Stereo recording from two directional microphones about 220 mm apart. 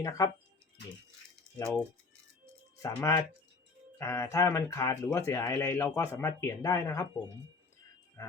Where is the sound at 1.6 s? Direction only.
5° left (ahead or behind).